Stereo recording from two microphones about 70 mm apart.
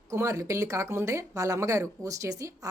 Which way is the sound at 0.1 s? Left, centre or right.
Right.